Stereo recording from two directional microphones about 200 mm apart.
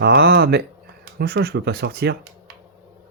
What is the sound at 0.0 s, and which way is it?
Speech, 55° right (ahead or behind).